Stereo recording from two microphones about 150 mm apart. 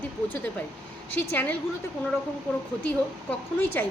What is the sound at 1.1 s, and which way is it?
Speech, 10° left (ahead or behind).